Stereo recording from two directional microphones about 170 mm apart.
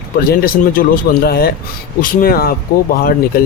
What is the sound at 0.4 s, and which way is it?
Speech, 55° left (ahead or behind).